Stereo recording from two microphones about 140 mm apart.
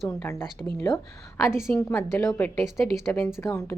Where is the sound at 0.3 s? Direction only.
15° left (ahead or behind).